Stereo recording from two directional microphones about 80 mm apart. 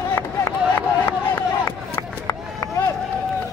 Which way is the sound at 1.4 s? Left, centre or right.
Left.